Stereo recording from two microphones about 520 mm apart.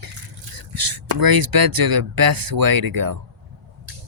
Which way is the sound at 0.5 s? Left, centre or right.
Right.